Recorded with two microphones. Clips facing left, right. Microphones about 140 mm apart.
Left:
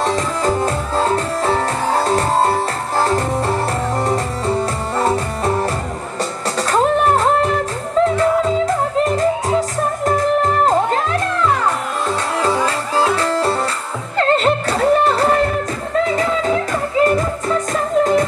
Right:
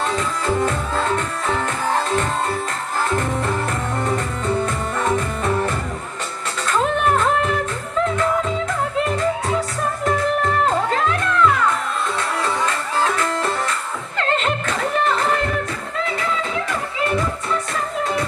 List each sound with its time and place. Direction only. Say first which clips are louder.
0.0 s music: left 4 dB; 35° left (ahead or behind)
6.7 s music: left 4 dB; 35° left (ahead or behind)
17.0 s music: left 6 dB; 40° left (ahead or behind)